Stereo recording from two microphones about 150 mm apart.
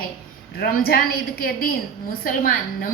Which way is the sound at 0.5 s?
90° left.